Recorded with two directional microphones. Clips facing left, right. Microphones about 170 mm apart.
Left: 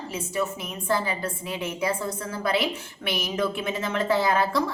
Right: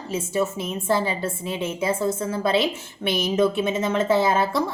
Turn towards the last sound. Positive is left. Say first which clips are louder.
# right 2 dB
turn(degrees=-20)  # may be behind; listen again after turning